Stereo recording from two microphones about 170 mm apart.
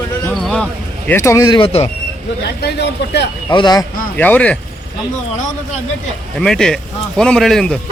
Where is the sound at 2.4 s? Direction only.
75° left (ahead or behind).